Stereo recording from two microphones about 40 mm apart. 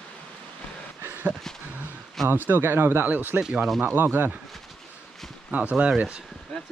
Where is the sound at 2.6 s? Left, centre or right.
Right.